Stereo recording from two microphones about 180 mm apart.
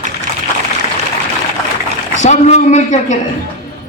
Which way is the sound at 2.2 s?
40° left (ahead or behind).